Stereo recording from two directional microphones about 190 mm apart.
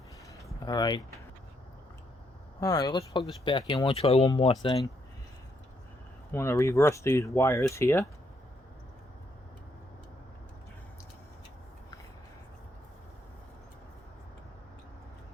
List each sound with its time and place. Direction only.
0.6 s speech: 20° left (ahead or behind)
2.6 s speech: 20° left (ahead or behind)
6.3 s speech: 15° left (ahead or behind)